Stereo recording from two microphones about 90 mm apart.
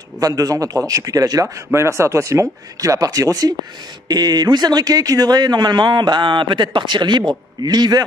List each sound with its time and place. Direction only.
0.2 s a man's voice: 40° right (ahead or behind)
1.7 s a man's voice: 30° right (ahead or behind); by 8.0 s 50° right (ahead or behind)